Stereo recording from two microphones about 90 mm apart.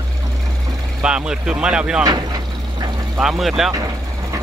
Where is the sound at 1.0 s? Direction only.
10° right (ahead or behind).